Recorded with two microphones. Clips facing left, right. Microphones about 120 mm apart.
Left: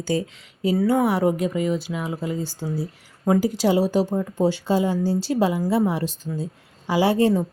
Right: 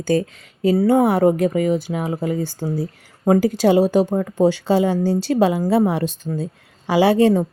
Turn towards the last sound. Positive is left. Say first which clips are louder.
# right 4 dB
turn(degrees=-70)  # may be behind; listen again after turning